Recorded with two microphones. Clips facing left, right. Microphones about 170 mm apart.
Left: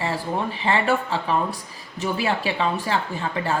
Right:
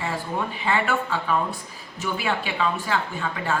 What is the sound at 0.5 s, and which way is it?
Speech, 30° left (ahead or behind).